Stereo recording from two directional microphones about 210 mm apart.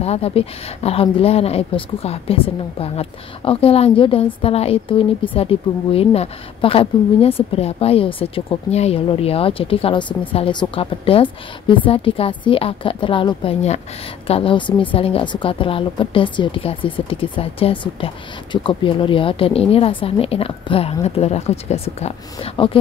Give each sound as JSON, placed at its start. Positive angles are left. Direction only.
{"t": 0.0, "sound": "speech", "side_deg": 30}